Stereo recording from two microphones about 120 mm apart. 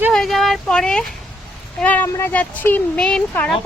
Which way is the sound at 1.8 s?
15° left (ahead or behind).